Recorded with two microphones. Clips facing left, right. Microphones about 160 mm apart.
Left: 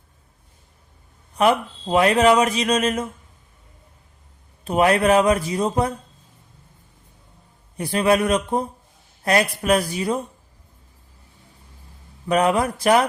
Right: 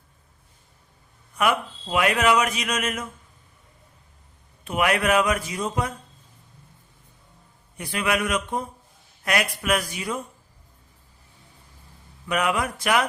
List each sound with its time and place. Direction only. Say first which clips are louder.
1.4 s speech: left 5 dB; 30° left (ahead or behind)
4.6 s speech: left 5 dB; 35° left (ahead or behind)
7.8 s speech: left 7 dB; 35° left (ahead or behind)
12.3 s speech: left 6 dB; 35° left (ahead or behind)